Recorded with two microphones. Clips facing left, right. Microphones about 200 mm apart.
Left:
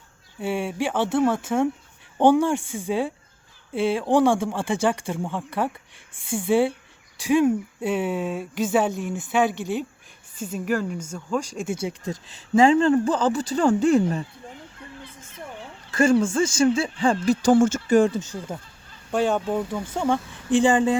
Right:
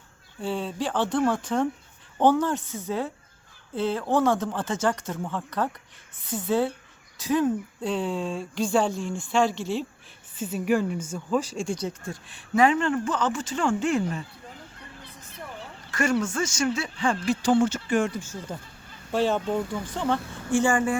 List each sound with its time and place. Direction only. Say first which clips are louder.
0.4 s speech: left 3 dB; 10° left (ahead or behind)
10.5 s a woman's voice: right 1 dB; 10° right (ahead or behind); by 12.1 s 10° left (ahead or behind)
12.5 s speech: left 5 dB; 30° left (ahead or behind)
15.9 s speech: left 6 dB; 30° left (ahead or behind)
19.5 s speech: left 2 dB; 5° left (ahead or behind)